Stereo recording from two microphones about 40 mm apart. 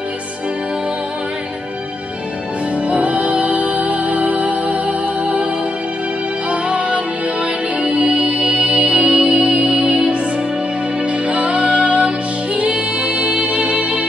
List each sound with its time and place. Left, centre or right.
2.9 s music: right
6.5 s music: right
11.2 s music: right